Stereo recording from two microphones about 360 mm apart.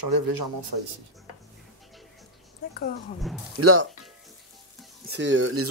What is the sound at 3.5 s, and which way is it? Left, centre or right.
Speech, right.